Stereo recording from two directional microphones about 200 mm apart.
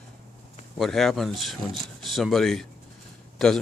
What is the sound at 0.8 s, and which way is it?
Speech, centre (ahead or behind).